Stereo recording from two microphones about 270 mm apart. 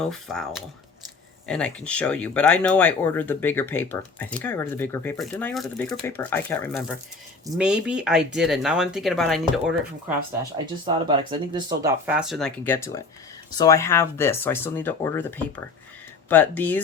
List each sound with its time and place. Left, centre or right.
0.0 s speech: centre
10.8 s speech: centre
12.0 s speech: centre